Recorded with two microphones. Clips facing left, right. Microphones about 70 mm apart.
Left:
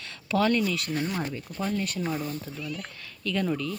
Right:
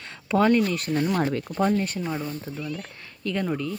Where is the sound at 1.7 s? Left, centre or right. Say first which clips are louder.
Right 3 dB; right.